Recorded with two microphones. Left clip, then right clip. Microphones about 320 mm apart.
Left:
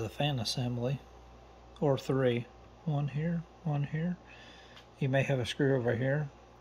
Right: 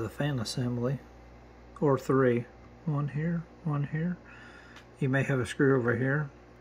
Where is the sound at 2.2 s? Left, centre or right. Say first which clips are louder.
Right 4 dB; centre.